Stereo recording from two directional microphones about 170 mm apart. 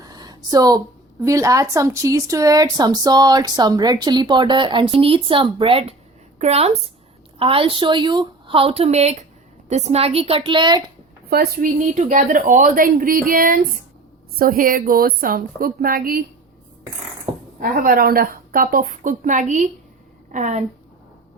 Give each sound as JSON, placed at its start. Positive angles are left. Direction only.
{"t": 0.0, "sound": "a sound", "side_deg": -25}
{"t": 1.2, "sound": "a woman's voice", "side_deg": -20}
{"t": 11.3, "sound": "a woman's voice", "side_deg": -65}
{"t": 17.6, "sound": "a woman's voice", "side_deg": -60}